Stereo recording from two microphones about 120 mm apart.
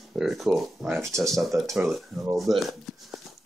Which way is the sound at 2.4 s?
Centre (ahead or behind).